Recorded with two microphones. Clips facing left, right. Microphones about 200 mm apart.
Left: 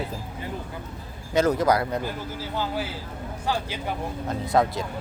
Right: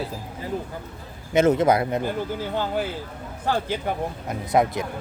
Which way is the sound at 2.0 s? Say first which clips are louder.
Right 5 dB; 55° right (ahead or behind).